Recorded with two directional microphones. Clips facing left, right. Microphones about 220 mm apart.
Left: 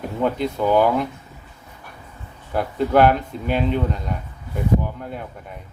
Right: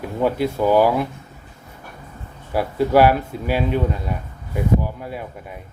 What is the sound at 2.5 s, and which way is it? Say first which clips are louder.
Speech: right 2 dB; 5° right (ahead or behind).